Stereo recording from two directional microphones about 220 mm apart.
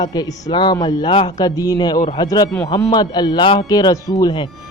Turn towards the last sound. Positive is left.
turn(degrees=20)  # may be behind; listen again after turning